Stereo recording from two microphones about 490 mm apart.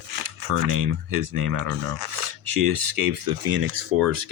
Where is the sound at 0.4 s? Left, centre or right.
Right.